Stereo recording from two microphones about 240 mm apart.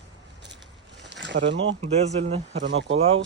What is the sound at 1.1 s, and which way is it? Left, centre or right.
Speech, right.